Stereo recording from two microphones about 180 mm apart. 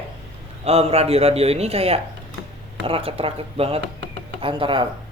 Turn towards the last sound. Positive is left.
turn(degrees=-30)  # may be behind; listen again after turning